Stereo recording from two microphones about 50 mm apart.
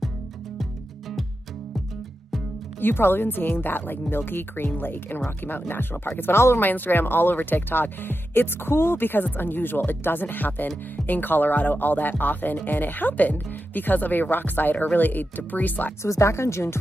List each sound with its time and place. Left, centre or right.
2.8 s speech: left
6.6 s speech: left
16.0 s speech: left